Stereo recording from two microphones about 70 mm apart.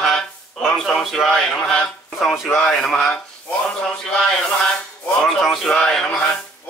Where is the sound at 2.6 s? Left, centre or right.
Centre.